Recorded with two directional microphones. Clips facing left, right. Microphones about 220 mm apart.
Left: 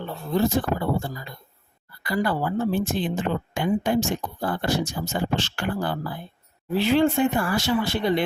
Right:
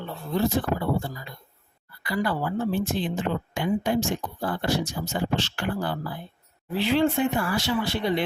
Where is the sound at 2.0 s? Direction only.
45° left (ahead or behind).